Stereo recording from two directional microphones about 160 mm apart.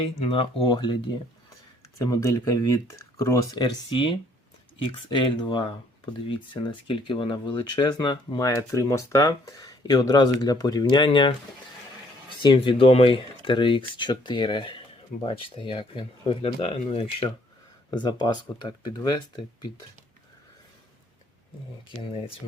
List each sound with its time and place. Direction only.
0.0 s speech: 35° left (ahead or behind)
2.0 s speech: 20° left (ahead or behind)
3.8 s speech: 30° left (ahead or behind)
12.4 s speech: 30° left (ahead or behind)